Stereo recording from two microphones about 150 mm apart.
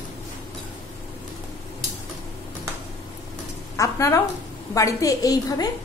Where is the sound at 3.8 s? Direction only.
20° left (ahead or behind).